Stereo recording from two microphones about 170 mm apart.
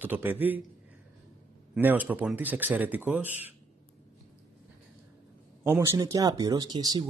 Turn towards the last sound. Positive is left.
turn(degrees=-25)  # may be behind; listen again after turning